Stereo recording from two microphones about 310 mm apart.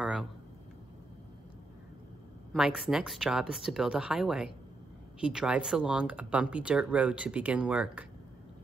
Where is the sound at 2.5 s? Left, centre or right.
Centre.